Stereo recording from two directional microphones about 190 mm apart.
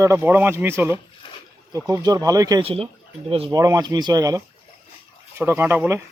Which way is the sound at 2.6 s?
30° right (ahead or behind).